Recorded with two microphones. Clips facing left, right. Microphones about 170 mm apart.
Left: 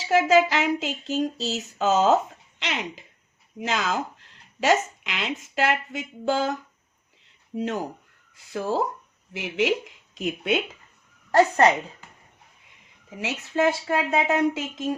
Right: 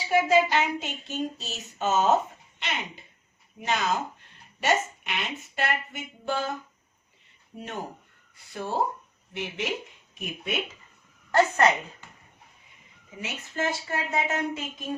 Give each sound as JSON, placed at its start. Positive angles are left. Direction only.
{"t": 0.0, "sound": "speech", "side_deg": 90}
{"t": 7.5, "sound": "speech", "side_deg": 90}
{"t": 11.3, "sound": "a woman's voice", "side_deg": 35}
{"t": 13.1, "sound": "speech", "side_deg": 80}